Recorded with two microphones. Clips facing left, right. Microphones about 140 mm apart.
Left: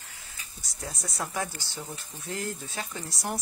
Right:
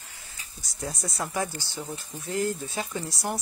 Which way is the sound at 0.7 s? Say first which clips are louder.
Right 3 dB; centre (ahead or behind).